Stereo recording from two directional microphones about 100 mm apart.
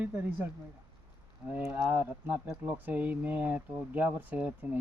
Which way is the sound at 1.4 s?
20° right (ahead or behind).